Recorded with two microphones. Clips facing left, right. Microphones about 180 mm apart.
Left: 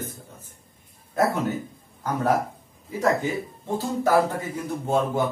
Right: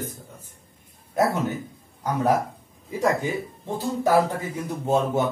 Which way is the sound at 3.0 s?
15° right (ahead or behind).